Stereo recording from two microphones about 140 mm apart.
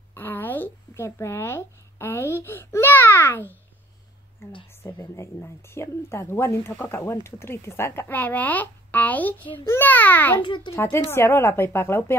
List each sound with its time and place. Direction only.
0.1 s a sound: 15° left (ahead or behind)
4.8 s speech: 20° left (ahead or behind)
10.4 s a child's voice: 35° left (ahead or behind)
10.7 s speech: 20° left (ahead or behind)